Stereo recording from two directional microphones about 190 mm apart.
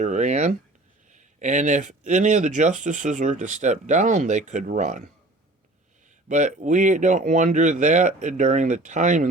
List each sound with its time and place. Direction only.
0.0 s speech: 40° right (ahead or behind)
6.2 s speech: 40° right (ahead or behind)